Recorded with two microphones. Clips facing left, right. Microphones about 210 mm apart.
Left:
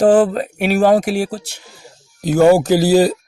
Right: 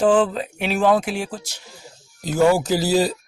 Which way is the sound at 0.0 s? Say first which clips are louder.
Left 5 dB; 45° left (ahead or behind).